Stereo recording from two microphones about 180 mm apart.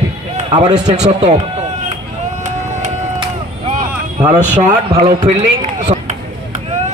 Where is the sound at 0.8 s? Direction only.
40° right (ahead or behind).